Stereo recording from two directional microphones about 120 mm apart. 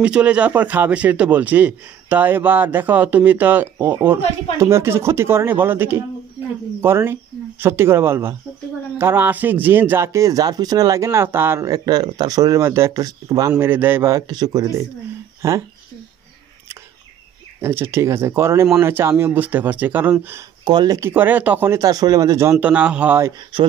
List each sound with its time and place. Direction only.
0.0 s a man's voice: 10° right (ahead or behind)
14.2 s speech: 35° right (ahead or behind)
17.6 s a man's voice: 20° right (ahead or behind)
20.6 s speech: 35° right (ahead or behind)
21.0 s speech: 15° right (ahead or behind)
22.6 s a man's voice: 10° right (ahead or behind)